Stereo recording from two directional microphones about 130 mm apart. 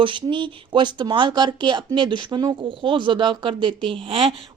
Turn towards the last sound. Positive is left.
turn(degrees=-45)  # may be behind; listen again after turning